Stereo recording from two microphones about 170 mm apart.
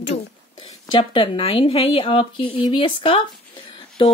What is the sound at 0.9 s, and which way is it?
A woman's voice, 30° left (ahead or behind).